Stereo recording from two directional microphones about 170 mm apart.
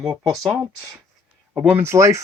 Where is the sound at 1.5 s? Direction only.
15° right (ahead or behind).